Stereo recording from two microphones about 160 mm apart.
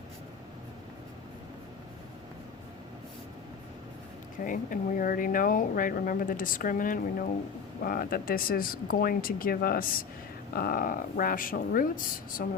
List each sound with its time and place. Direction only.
4.4 s speech: 55° left (ahead or behind)